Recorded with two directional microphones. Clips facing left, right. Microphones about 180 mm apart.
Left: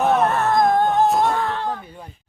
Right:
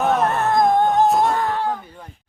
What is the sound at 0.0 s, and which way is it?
Music, centre (ahead or behind).